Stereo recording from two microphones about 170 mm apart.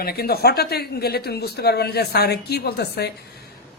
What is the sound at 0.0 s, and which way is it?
Speech, 65° left (ahead or behind).